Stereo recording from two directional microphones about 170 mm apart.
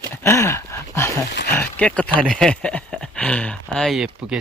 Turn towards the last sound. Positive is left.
turn(degrees=-5)  # may be behind; listen again after turning